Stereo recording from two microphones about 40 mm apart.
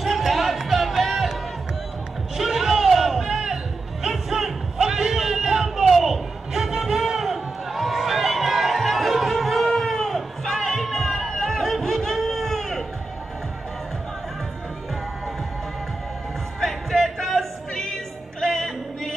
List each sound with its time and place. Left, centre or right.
0.0 s music: centre
2.3 s a sound: centre
16.5 s music: centre